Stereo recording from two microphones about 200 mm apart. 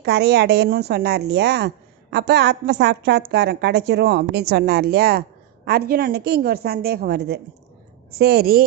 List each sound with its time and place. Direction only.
0.0 s a woman's voice: 55° right (ahead or behind)